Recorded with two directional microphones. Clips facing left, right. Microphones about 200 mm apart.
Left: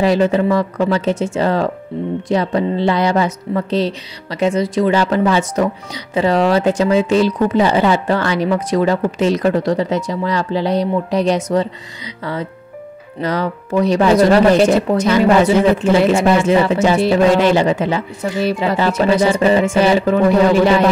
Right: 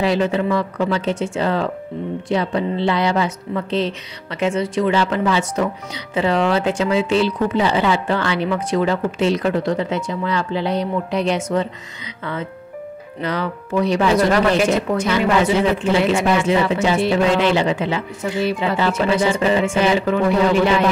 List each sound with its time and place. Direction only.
0.0 s speech: 40° left (ahead or behind)
13.2 s speech: 40° left (ahead or behind)